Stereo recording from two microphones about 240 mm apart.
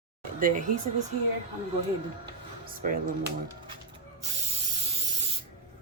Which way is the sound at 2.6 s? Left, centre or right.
Right.